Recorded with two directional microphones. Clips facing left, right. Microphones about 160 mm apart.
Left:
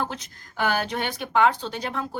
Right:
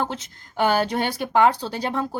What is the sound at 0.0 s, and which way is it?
A woman's voice, 25° right (ahead or behind).